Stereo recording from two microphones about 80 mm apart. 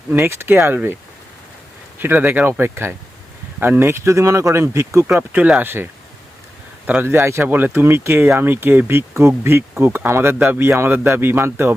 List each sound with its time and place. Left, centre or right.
0.1 s speech: right
2.0 s speech: right
5.3 s speech: right
7.4 s speech: right